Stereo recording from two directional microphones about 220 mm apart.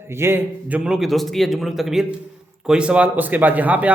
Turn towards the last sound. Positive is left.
turn(degrees=-5)  # may be behind; listen again after turning